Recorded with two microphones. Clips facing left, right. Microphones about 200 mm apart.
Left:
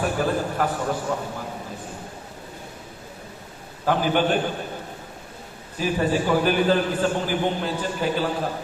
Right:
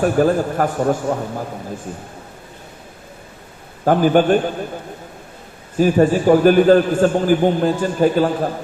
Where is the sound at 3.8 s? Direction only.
45° right (ahead or behind).